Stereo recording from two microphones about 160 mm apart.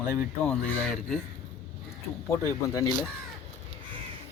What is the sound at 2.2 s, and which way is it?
Speech, 20° left (ahead or behind).